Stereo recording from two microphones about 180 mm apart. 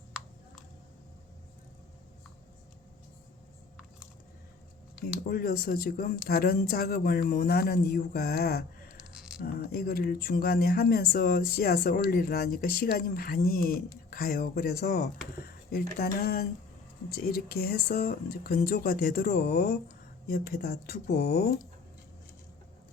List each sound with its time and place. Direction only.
5.3 s speech: 55° left (ahead or behind)